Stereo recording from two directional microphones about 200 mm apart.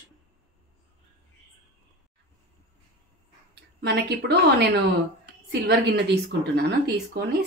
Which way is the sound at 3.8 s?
55° right (ahead or behind).